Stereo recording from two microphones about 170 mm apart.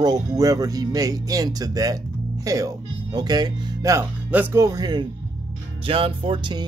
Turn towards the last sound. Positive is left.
turn(degrees=-25)  # may be behind; listen again after turning